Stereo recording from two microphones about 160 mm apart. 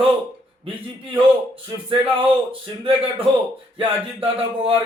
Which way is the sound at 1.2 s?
30° right (ahead or behind).